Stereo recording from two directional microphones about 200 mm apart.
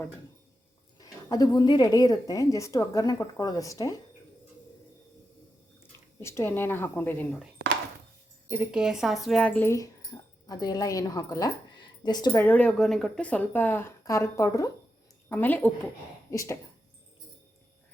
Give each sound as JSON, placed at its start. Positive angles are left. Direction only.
{"t": 0.9, "sound": "a woman's voice", "side_deg": 20}
{"t": 6.2, "sound": "speech", "side_deg": 10}
{"t": 8.4, "sound": "speech", "side_deg": -10}